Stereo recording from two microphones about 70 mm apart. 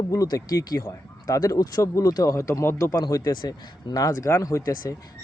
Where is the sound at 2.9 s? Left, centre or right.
Left.